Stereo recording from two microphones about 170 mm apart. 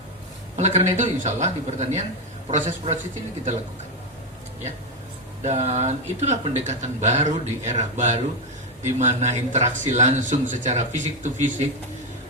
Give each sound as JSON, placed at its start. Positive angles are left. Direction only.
{"t": 0.5, "sound": "speech", "side_deg": -40}
{"t": 5.4, "sound": "speech", "side_deg": -40}